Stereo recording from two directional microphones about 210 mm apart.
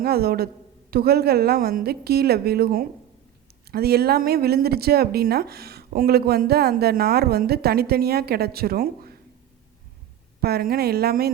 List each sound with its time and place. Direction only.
0.0 s a woman's voice: 45° right (ahead or behind)
10.4 s a woman's voice: 45° right (ahead or behind)